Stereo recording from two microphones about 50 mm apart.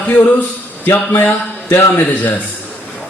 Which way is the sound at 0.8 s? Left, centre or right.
Left.